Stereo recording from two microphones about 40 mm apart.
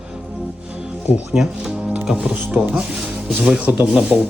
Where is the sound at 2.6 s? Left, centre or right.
Centre.